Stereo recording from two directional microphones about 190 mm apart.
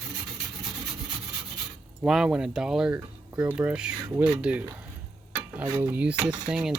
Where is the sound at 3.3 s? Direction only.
15° right (ahead or behind).